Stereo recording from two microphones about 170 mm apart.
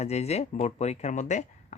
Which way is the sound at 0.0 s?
40° left (ahead or behind).